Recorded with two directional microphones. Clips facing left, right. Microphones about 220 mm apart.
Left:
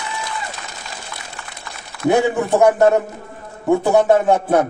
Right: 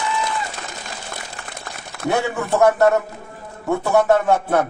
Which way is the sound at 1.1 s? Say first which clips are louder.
Right 2 dB; 45° right (ahead or behind).